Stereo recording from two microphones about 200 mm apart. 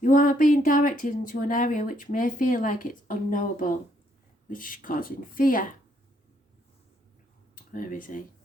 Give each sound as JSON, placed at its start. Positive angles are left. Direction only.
{"t": 0.0, "sound": "a woman's voice", "side_deg": 40}
{"t": 7.5, "sound": "speech", "side_deg": 45}